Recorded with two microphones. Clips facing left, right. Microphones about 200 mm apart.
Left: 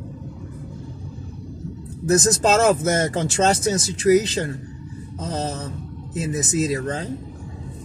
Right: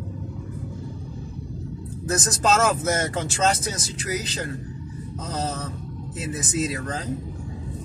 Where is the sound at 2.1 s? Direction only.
30° left (ahead or behind).